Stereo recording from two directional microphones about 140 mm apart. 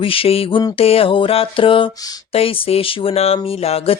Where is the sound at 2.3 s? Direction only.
45° left (ahead or behind).